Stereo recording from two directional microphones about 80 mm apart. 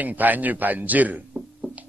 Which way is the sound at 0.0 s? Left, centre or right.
Right.